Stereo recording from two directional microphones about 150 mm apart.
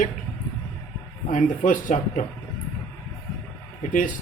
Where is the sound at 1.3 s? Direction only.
60° left (ahead or behind).